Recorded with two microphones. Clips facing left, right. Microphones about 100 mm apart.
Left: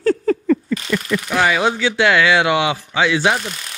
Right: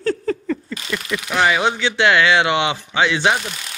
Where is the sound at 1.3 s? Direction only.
20° right (ahead or behind).